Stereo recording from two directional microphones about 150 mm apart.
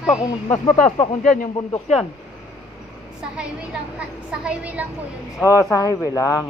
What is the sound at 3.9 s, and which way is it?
Speech, 5° right (ahead or behind).